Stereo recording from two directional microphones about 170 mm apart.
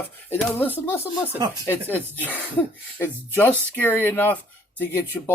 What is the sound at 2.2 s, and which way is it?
Speech, 10° left (ahead or behind).